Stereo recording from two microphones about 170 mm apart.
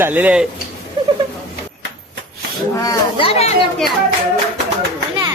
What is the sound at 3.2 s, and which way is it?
Speech, 35° left (ahead or behind).